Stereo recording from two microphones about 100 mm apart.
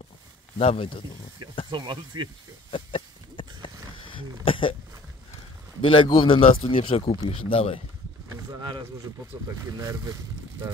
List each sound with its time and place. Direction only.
0.6 s speech: 75° left (ahead or behind)
1.7 s speech: 50° right (ahead or behind)
2.7 s a sound: 60° left (ahead or behind)
4.5 s speech: 60° left (ahead or behind)
5.8 s speech: 60° left (ahead or behind)
8.3 s a sound: 45° right (ahead or behind)
9.8 s speech: 40° right (ahead or behind)